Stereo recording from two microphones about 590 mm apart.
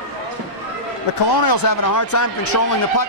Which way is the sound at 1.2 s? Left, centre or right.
Left.